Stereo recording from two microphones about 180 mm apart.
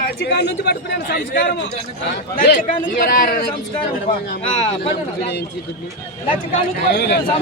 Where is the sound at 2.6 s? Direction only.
55° left (ahead or behind).